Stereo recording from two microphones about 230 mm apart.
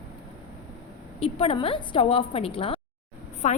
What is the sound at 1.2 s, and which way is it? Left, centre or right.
A woman's voice, left.